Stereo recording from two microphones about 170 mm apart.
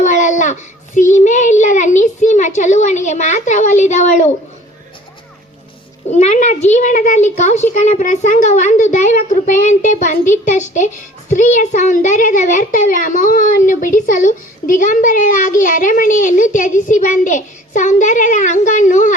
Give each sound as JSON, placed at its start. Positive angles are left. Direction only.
{"t": 0.0, "sound": "a child's voice", "side_deg": 45}
{"t": 6.1, "sound": "a child's voice", "side_deg": 45}